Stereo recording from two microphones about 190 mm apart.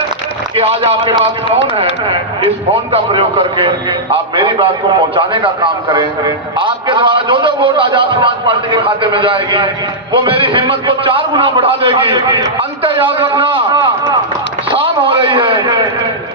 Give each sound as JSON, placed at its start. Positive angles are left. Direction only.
{"t": 0.5, "sound": "a man's voice", "side_deg": -30}